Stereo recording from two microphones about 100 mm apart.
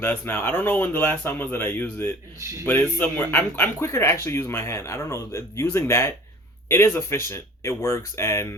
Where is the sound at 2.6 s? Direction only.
20° left (ahead or behind).